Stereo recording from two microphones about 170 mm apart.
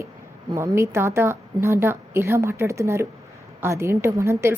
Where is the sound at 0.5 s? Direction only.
15° right (ahead or behind).